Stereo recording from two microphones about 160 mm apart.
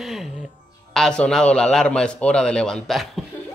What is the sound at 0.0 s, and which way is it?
Music, centre (ahead or behind).